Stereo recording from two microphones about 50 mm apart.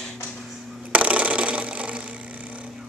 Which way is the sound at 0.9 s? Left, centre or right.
Right.